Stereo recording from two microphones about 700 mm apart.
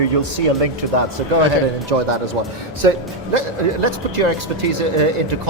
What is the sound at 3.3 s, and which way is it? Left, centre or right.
Speech, right.